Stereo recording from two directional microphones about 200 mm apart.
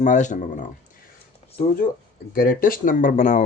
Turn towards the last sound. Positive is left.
turn(degrees=35)  # may be behind; listen again after turning